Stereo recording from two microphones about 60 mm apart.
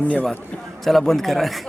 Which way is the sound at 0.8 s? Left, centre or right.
Centre.